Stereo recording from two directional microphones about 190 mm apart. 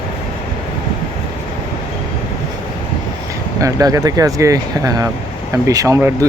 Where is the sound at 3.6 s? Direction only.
15° right (ahead or behind).